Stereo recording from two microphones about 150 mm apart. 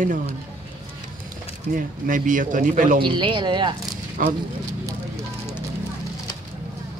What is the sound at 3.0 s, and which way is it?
Speech, 30° right (ahead or behind).